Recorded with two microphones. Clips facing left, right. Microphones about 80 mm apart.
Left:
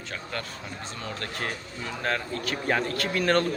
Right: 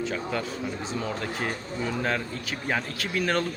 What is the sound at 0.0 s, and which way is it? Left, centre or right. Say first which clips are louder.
Speech: right 6 dB; centre.